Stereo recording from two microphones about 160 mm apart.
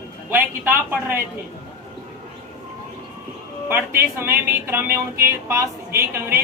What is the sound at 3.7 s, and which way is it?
Speech, 15° right (ahead or behind).